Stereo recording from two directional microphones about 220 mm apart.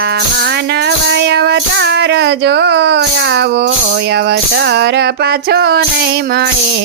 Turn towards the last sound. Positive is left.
turn(degrees=-45)  # may be behind; listen again after turning